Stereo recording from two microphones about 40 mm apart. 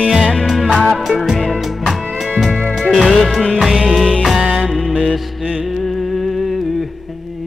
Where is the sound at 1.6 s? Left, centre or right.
Centre.